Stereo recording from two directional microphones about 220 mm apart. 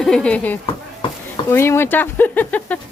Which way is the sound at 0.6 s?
25° left (ahead or behind).